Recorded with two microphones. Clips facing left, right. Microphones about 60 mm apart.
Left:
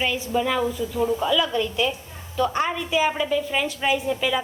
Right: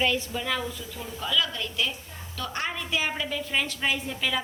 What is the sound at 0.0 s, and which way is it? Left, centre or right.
A woman's voice, centre.